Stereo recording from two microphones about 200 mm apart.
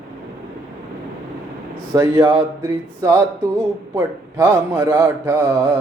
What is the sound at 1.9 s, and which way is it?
Speech, 15° right (ahead or behind).